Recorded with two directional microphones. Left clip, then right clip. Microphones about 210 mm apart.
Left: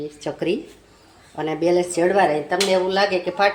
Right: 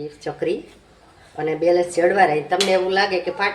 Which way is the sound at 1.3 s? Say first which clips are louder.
Right 2 dB; 35° left (ahead or behind).